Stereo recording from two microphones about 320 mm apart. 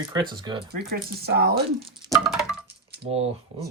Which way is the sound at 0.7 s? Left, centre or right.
Right.